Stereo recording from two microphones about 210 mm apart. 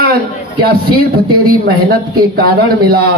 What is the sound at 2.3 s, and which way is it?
Speech, 45° right (ahead or behind).